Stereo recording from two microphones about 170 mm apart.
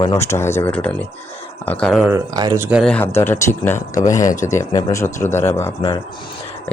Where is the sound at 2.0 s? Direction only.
20° right (ahead or behind).